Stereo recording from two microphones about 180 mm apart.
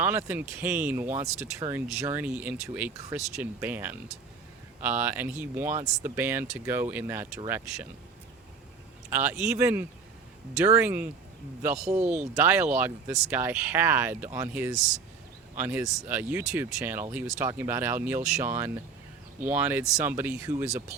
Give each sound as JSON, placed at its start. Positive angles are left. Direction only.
{"t": 0.0, "sound": "speech", "side_deg": -10}
{"t": 1.1, "sound": "speech", "side_deg": -40}
{"t": 1.5, "sound": "speech", "side_deg": -15}
{"t": 9.0, "sound": "speech", "side_deg": -10}
{"t": 11.7, "sound": "speech", "side_deg": -40}
{"t": 12.0, "sound": "speech", "side_deg": -10}